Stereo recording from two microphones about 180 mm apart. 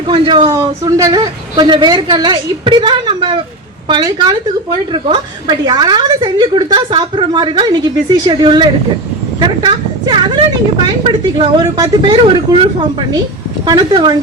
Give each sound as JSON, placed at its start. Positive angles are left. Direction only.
{"t": 0.1, "sound": "a woman's voice", "side_deg": -25}